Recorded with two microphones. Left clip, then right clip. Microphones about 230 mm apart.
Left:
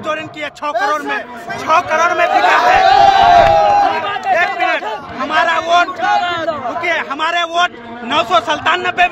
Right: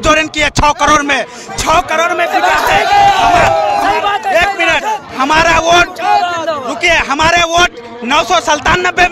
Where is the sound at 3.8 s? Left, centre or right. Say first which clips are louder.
Right 3 dB; right.